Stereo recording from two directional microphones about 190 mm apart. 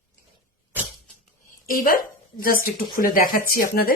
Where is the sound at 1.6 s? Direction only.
45° left (ahead or behind).